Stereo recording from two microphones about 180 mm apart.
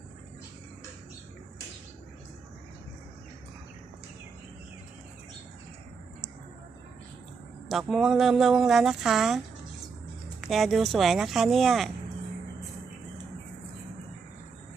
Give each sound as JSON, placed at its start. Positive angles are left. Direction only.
{"t": 7.7, "sound": "speech", "side_deg": 0}
{"t": 10.5, "sound": "speech", "side_deg": 0}